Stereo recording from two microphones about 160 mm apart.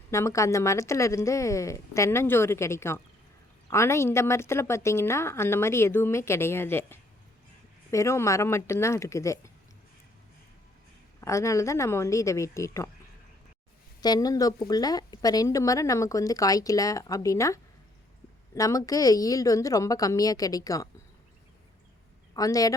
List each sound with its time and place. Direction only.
0.1 s a woman's voice: 20° left (ahead or behind)
11.2 s speech: 20° left (ahead or behind)
14.0 s speech: 25° left (ahead or behind)
22.4 s speech: 20° left (ahead or behind)